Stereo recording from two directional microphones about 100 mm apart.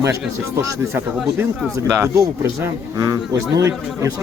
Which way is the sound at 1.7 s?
30° right (ahead or behind).